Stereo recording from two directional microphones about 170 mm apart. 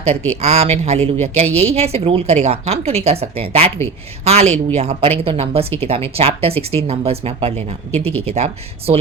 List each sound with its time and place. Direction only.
0.4 s speech: 40° right (ahead or behind)